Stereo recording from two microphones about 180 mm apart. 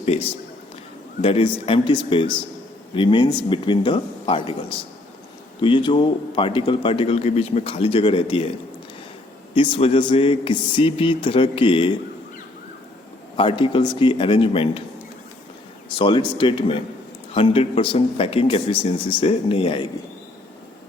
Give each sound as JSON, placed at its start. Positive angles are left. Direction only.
{"t": 1.2, "sound": "a man's voice", "side_deg": 30}
{"t": 5.5, "sound": "a man's voice", "side_deg": 25}
{"t": 9.6, "sound": "a man's voice", "side_deg": 30}
{"t": 13.3, "sound": "a man's voice", "side_deg": 30}
{"t": 16.0, "sound": "a man's voice", "side_deg": 25}